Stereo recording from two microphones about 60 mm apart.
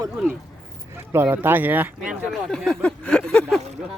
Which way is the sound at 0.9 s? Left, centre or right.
Right.